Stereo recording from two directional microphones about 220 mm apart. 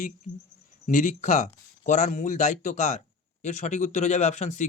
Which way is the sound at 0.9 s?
35° left (ahead or behind).